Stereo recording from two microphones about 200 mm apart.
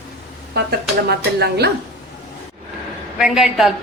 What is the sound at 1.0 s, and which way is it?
Speech, 55° right (ahead or behind).